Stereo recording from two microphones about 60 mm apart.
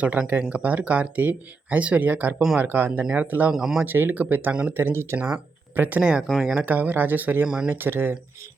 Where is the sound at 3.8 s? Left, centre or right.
Right.